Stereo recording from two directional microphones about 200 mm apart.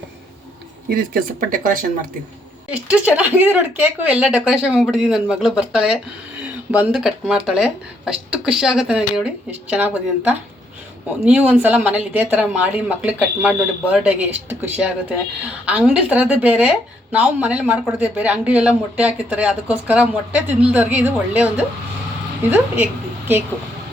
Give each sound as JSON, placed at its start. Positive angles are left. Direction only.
{"t": 0.9, "sound": "speech", "side_deg": -45}
{"t": 2.7, "sound": "a woman's voice", "side_deg": -5}